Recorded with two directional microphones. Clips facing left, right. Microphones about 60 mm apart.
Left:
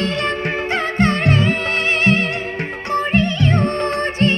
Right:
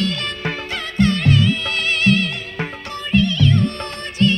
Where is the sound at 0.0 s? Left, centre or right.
Left.